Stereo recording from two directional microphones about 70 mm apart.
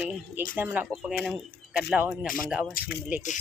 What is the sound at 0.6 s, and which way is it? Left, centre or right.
Speech, right.